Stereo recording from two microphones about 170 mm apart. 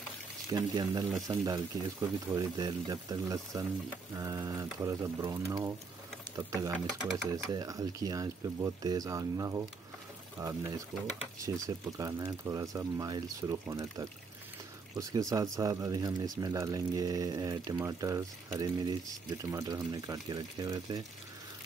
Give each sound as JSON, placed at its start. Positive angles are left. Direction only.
{"t": 0.5, "sound": "speech", "side_deg": -25}